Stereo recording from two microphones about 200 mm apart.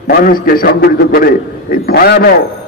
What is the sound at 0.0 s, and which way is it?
A man's voice, 50° left (ahead or behind).